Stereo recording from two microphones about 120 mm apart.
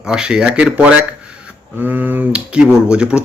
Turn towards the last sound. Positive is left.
turn(degrees=-10)  # may be behind; listen again after turning